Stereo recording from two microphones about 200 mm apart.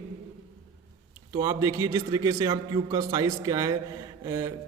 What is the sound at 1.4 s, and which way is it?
A man's voice, 15° right (ahead or behind).